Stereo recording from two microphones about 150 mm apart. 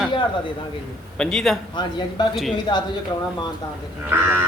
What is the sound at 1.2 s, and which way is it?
A man's voice, 5° left (ahead or behind).